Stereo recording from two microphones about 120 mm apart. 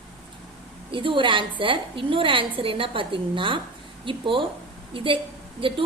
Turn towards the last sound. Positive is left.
turn(degrees=-45)  # may be behind; listen again after turning